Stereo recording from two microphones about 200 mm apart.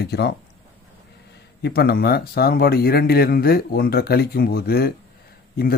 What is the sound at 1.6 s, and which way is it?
Speech, 55° left (ahead or behind).